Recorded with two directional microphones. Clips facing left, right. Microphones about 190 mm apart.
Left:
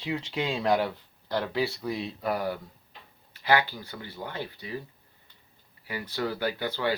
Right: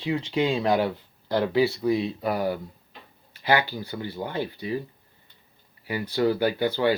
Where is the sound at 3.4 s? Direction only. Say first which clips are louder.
Right 2 dB; 15° right (ahead or behind).